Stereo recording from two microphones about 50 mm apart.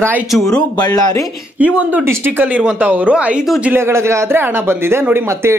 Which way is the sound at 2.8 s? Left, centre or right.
Right.